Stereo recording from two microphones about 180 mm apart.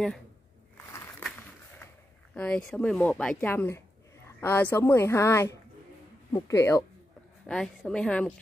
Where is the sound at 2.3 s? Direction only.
5° left (ahead or behind).